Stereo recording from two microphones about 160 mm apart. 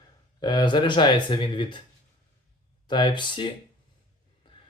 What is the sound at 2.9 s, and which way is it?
Speech, 30° left (ahead or behind).